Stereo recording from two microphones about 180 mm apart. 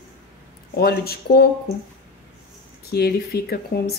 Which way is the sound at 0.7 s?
60° left (ahead or behind).